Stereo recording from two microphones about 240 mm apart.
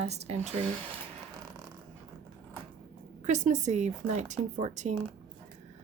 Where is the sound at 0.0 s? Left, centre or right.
Right.